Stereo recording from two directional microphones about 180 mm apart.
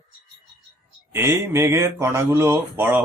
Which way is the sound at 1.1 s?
15° right (ahead or behind).